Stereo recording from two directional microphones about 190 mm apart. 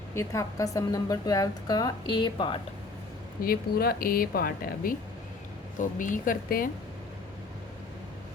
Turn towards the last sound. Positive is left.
turn(degrees=45)  # may be behind; listen again after turning